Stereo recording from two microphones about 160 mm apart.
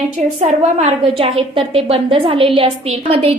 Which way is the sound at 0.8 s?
35° right (ahead or behind).